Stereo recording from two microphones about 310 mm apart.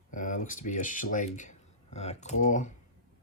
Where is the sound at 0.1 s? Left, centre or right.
Left.